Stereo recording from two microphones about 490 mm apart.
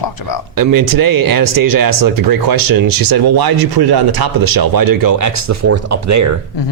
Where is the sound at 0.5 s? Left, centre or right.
Right.